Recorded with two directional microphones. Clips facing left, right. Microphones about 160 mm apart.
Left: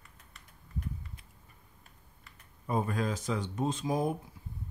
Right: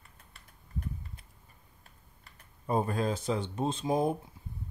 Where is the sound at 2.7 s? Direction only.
30° right (ahead or behind).